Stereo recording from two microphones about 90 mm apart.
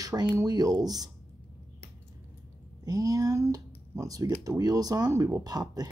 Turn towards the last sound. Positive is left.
turn(degrees=-45)  # may be behind; listen again after turning